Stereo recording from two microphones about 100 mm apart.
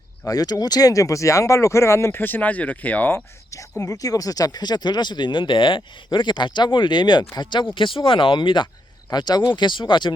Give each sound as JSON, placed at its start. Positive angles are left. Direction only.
{"t": 0.3, "sound": "speech", "side_deg": 35}
{"t": 3.5, "sound": "speech", "side_deg": 35}
{"t": 7.8, "sound": "speech", "side_deg": 60}